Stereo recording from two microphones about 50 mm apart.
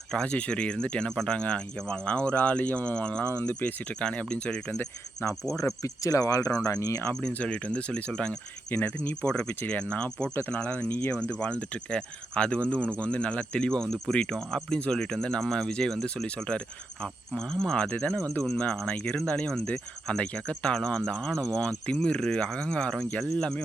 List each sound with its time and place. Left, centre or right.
0.1 s speech: left
4.0 s speech: left
5.2 s speech: left
5.5 s speech: left
7.1 s speech: left
8.7 s speech: left
9.2 s speech: left
11.3 s speech: left
17.8 s speech: left